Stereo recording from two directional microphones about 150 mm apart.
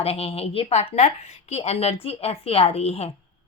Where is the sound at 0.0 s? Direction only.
40° left (ahead or behind).